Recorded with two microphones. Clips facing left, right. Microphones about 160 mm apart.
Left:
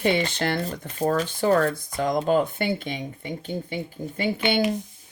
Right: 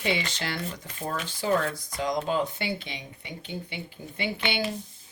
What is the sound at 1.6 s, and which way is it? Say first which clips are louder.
Speech: left 5 dB; 55° left (ahead or behind).